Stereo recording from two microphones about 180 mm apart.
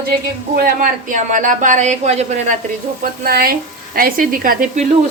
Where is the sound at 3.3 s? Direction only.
60° right (ahead or behind).